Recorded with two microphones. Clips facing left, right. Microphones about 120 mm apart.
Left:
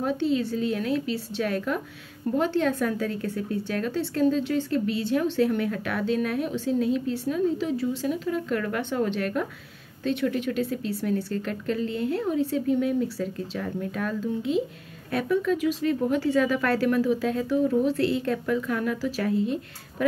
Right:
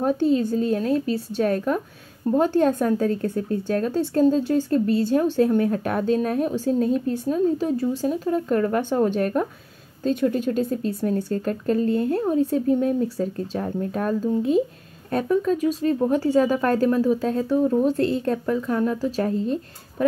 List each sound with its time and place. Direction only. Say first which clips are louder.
0.0 s speech: right 5 dB; 40° right (ahead or behind)